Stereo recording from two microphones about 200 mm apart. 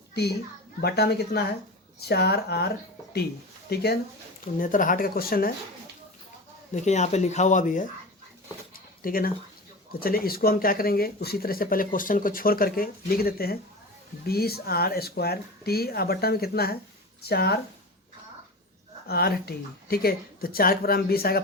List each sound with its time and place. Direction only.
0.1 s a child's voice: 55° left (ahead or behind)
3.7 s speech: 50° left (ahead or behind)
4.5 s speech: 40° left (ahead or behind)
6.7 s speech: 35° left (ahead or behind)
8.7 s a sound: 45° left (ahead or behind)
10.0 s speech: 50° left (ahead or behind)
19.0 s speech: 50° left (ahead or behind)